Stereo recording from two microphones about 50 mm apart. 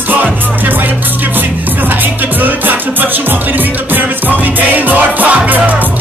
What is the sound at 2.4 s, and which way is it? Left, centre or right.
Music, right.